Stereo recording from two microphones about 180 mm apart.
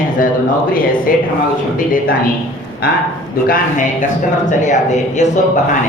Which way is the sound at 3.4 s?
50° left (ahead or behind).